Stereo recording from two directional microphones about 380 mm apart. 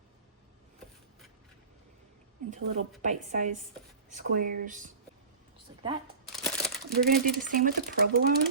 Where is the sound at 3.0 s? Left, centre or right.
Centre.